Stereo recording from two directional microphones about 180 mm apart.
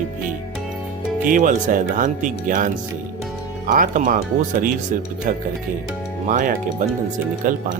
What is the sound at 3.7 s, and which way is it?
Speech, 45° right (ahead or behind).